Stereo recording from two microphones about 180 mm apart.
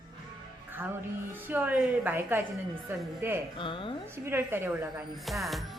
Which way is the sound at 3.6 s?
30° left (ahead or behind).